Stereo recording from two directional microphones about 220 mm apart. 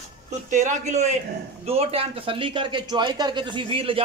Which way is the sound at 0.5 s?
35° right (ahead or behind).